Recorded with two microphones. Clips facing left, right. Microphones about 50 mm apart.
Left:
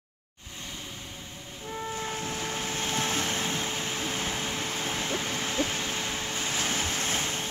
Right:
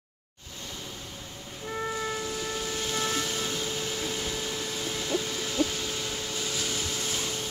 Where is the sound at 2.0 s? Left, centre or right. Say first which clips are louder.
Right 1 dB; left.